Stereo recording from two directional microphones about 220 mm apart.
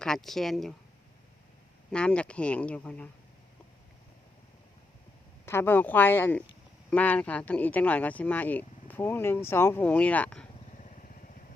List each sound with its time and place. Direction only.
0.0 s speech: centre (ahead or behind)
1.9 s speech: 5° left (ahead or behind)
5.5 s speech: 10° left (ahead or behind)
10.8 s vehicle: 35° left (ahead or behind)